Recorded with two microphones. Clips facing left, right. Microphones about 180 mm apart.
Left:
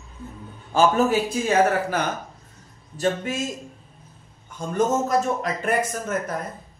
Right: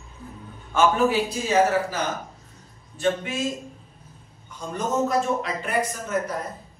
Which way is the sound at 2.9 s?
40° left (ahead or behind).